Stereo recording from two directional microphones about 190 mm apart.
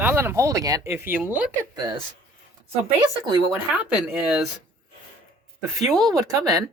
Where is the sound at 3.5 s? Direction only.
5° right (ahead or behind).